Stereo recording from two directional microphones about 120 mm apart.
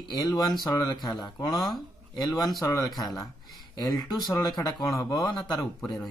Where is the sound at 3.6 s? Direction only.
35° left (ahead or behind).